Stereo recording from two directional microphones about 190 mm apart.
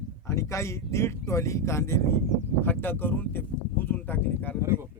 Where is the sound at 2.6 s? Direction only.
10° left (ahead or behind).